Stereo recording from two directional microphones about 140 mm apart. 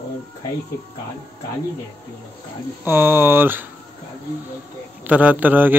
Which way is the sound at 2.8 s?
15° right (ahead or behind).